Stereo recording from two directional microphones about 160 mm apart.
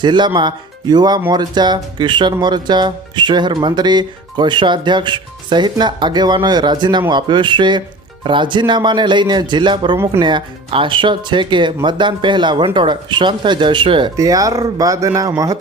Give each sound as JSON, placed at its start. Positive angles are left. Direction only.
{"t": 0.0, "sound": "speech", "side_deg": -30}